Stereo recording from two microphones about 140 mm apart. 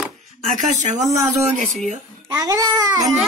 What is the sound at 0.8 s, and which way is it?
Speech, 60° right (ahead or behind).